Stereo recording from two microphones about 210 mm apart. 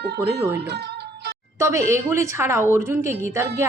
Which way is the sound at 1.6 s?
15° right (ahead or behind).